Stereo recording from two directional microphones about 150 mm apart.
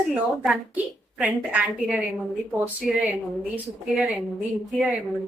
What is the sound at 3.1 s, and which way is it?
A woman's voice, 10° right (ahead or behind).